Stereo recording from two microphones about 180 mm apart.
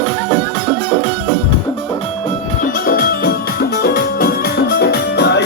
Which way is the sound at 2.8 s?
55° left (ahead or behind).